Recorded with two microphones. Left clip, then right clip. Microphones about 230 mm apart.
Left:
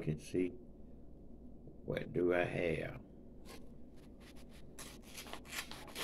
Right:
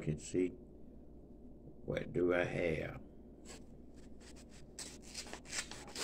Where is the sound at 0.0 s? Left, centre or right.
Centre.